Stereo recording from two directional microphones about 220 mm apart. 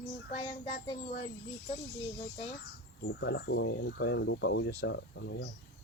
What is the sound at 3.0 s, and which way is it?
Speech, 50° left (ahead or behind).